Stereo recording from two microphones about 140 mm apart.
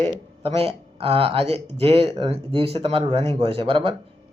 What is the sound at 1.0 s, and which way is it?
Speech, 45° right (ahead or behind).